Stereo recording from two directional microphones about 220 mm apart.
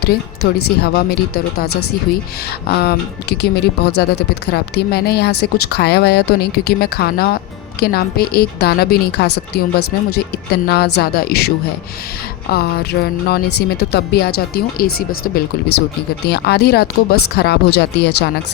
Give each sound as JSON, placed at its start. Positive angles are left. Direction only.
{"t": 0.4, "sound": "speech", "side_deg": 45}
{"t": 16.2, "sound": "speech", "side_deg": 45}